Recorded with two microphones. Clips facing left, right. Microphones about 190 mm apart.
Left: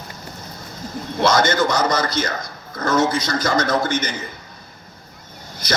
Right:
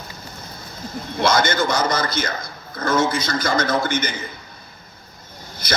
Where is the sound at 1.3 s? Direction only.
40° left (ahead or behind).